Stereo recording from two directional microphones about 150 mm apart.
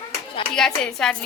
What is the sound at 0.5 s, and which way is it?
Speech, 5° left (ahead or behind).